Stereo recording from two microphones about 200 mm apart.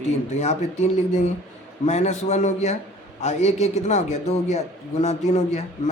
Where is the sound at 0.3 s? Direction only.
35° left (ahead or behind).